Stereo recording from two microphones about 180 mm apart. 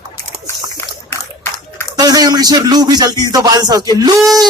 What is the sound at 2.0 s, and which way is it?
Music, 20° right (ahead or behind).